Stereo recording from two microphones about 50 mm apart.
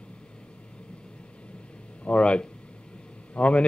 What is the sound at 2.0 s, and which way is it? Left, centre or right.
A man's voice, left.